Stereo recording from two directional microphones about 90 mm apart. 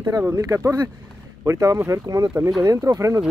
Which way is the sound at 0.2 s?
35° right (ahead or behind).